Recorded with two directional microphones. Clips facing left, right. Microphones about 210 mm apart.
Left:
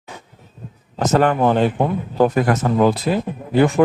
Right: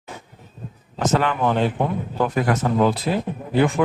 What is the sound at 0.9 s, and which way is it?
Speech, 40° left (ahead or behind).